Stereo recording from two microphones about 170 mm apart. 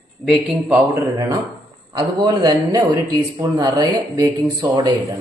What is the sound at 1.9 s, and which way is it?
A man's voice, 25° right (ahead or behind).